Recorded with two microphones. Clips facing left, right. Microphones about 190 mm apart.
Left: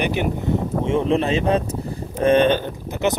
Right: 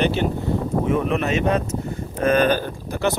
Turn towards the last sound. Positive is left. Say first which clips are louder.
# left 1 dB
turn(degrees=20)  # may be behind; listen again after turning